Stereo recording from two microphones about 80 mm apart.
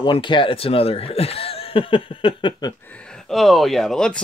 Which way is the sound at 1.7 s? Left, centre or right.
Left.